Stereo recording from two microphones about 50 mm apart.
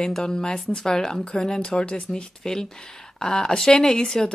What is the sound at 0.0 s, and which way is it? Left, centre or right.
Speech, centre.